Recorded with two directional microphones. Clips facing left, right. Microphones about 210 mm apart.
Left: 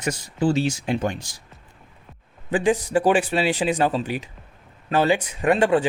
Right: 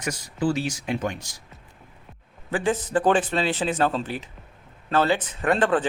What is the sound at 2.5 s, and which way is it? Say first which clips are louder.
Speech: left 3 dB; 15° left (ahead or behind).